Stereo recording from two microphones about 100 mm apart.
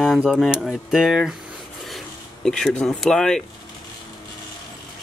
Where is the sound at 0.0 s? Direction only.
5° right (ahead or behind).